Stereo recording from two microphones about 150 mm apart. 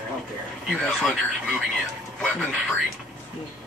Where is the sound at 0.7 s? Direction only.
Centre (ahead or behind).